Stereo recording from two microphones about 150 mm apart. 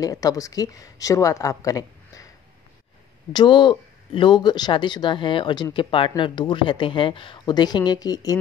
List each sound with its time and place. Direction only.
0.0 s speech: 25° left (ahead or behind)
3.3 s speech: 30° left (ahead or behind)